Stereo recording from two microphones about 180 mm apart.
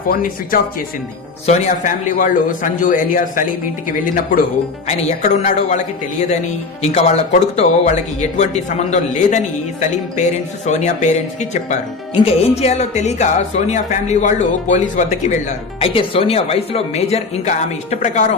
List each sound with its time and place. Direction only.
0.1 s a man's voice: 50° left (ahead or behind)
1.5 s a man's voice: 40° left (ahead or behind)